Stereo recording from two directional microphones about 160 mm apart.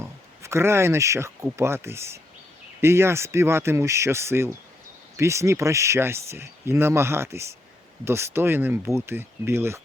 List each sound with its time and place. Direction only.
0.0 s speech: 15° right (ahead or behind)